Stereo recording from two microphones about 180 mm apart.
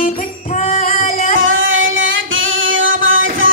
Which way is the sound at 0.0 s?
45° left (ahead or behind).